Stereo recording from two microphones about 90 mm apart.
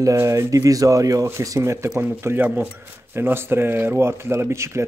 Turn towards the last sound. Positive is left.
turn(degrees=-30)  # may be behind; listen again after turning